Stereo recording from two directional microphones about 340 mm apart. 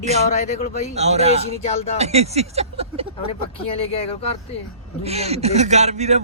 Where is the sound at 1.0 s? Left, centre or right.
Centre.